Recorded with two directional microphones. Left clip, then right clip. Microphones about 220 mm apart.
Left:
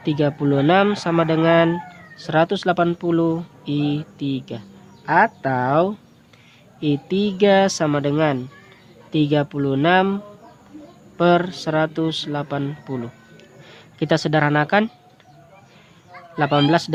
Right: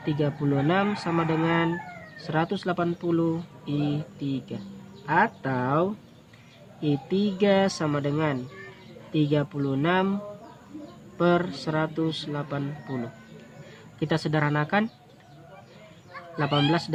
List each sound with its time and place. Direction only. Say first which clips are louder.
0.0 s speech: left 7 dB; 40° left (ahead or behind)
11.2 s speech: left 7 dB; 45° left (ahead or behind)
14.0 s speech: left 8 dB; 45° left (ahead or behind)
16.4 s speech: left 7 dB; 50° left (ahead or behind)